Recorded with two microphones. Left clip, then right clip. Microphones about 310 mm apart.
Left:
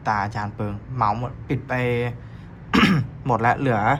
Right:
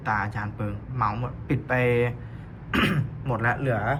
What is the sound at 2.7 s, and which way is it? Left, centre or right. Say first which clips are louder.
Throat clearing: left 6 dB; centre.